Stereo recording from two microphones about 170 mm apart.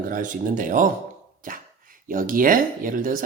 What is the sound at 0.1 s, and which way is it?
Speech, 50° right (ahead or behind).